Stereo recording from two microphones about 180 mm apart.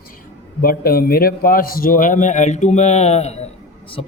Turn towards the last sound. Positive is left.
turn(degrees=30)  # may be behind; listen again after turning